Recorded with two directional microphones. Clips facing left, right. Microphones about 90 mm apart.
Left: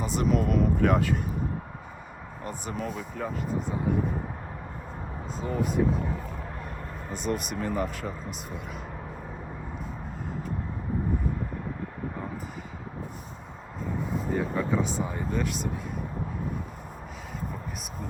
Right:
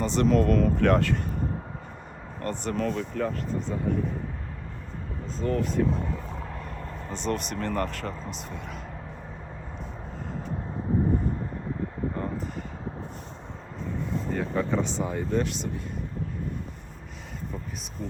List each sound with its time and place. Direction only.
0.0 s speech: 5° left (ahead or behind)
2.4 s speech: 5° left (ahead or behind)
5.4 s speech: 5° left (ahead or behind)
6.7 s vehicle: 50° left (ahead or behind)
7.1 s speech: 5° left (ahead or behind)
14.1 s speech: 5° left (ahead or behind)